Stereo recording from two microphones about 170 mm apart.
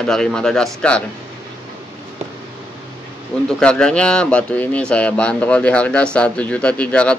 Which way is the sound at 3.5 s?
5° left (ahead or behind).